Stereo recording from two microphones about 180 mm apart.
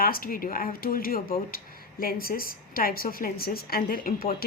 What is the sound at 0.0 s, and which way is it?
Speech, 55° left (ahead or behind).